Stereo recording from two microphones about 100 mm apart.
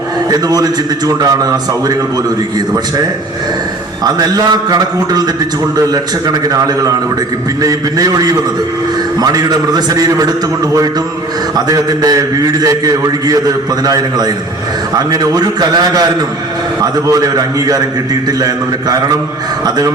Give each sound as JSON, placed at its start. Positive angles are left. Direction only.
{"t": 0.3, "sound": "a man's voice", "side_deg": -40}
{"t": 4.0, "sound": "a man's voice", "side_deg": -40}
{"t": 11.5, "sound": "a man's voice", "side_deg": -40}